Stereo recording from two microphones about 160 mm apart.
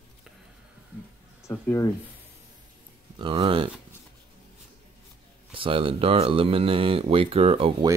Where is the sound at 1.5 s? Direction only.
20° left (ahead or behind).